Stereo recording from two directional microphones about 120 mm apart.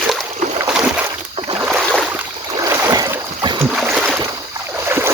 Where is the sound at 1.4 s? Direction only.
45° right (ahead or behind).